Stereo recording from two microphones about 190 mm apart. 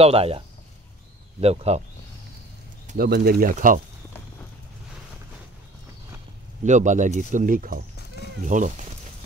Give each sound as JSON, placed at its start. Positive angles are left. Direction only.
{"t": 0.0, "sound": "speech", "side_deg": -30}
{"t": 1.4, "sound": "speech", "side_deg": -35}
{"t": 2.9, "sound": "speech", "side_deg": -50}
{"t": 6.6, "sound": "speech", "side_deg": -40}